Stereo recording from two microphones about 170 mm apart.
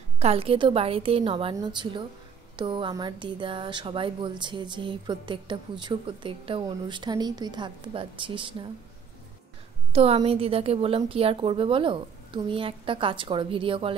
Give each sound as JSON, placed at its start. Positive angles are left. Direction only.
{"t": 0.2, "sound": "a woman's voice", "side_deg": -35}
{"t": 9.9, "sound": "a woman's voice", "side_deg": -35}